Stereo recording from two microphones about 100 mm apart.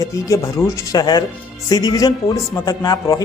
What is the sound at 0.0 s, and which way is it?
A man's voice, 35° left (ahead or behind).